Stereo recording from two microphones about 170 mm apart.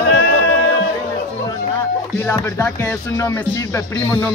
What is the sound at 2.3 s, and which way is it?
Music, 15° left (ahead or behind).